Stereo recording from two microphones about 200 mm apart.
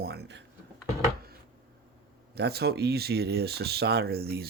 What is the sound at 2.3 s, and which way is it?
Speech, 55° right (ahead or behind).